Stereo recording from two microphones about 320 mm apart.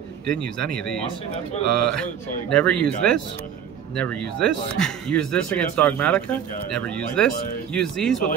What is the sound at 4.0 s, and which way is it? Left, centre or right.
Speech, centre.